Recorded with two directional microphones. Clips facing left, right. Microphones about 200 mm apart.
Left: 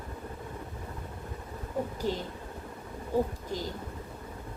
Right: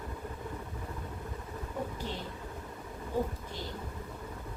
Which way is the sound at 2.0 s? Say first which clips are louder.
Left 8 dB; 40° left (ahead or behind).